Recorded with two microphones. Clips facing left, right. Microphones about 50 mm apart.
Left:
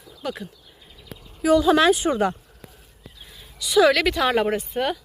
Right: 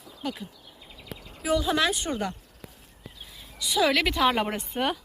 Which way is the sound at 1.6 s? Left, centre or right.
Left.